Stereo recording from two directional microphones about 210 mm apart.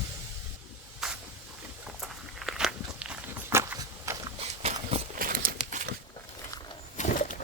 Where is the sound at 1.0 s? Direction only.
Centre (ahead or behind).